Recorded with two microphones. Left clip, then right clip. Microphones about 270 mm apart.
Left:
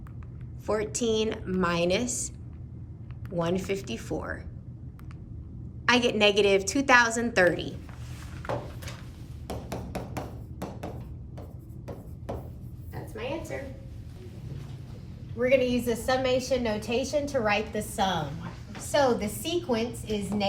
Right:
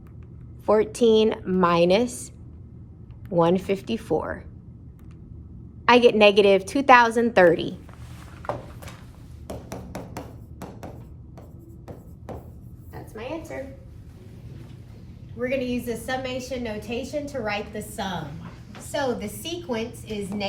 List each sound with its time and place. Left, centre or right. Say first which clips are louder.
0.6 s a woman's voice: right 9 dB; centre
3.3 s a woman's voice: right 8 dB; centre
5.8 s a woman's voice: right 7 dB; centre
9.5 s a sound: even; centre
12.9 s a sound: right 1 dB; centre
15.4 s a woman's voice: left 3 dB; centre